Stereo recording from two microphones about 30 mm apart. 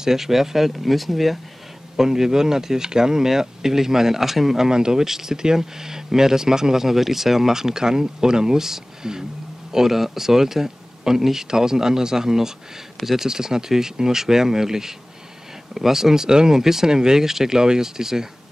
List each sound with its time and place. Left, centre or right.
0.0 s speech: centre
2.0 s speech: centre
4.6 s speech: right